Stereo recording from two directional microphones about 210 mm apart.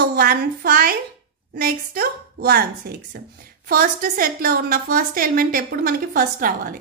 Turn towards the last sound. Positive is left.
turn(degrees=-40)  # may be behind; listen again after turning